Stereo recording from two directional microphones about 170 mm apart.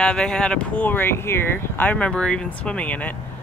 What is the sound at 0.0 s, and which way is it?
Speech, 5° left (ahead or behind).